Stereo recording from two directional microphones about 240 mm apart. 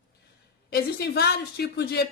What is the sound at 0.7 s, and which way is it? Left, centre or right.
A woman's voice, left.